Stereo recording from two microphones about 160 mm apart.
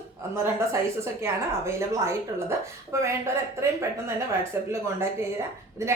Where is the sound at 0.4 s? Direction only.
15° right (ahead or behind).